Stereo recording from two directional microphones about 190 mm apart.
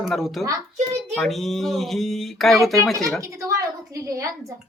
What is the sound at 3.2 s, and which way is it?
A woman's voice, 15° right (ahead or behind).